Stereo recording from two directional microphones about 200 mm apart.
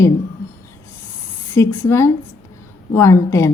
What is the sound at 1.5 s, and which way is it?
A woman's voice, 10° left (ahead or behind).